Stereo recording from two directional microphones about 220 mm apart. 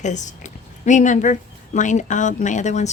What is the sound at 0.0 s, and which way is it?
Speech, 35° left (ahead or behind).